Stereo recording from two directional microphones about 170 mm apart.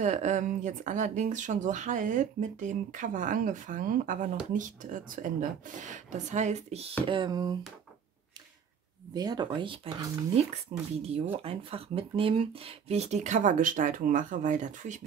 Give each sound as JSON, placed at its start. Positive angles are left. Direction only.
{"t": 0.0, "sound": "speech", "side_deg": -45}
{"t": 7.1, "sound": "speech", "side_deg": -25}
{"t": 9.1, "sound": "speech", "side_deg": -25}
{"t": 10.7, "sound": "speech", "side_deg": -40}